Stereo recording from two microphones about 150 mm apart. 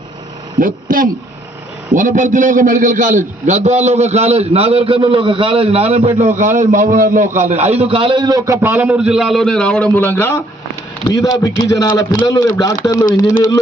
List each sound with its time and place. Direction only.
0.6 s a man's voice: 70° right (ahead or behind); by 13.1 s 25° left (ahead or behind)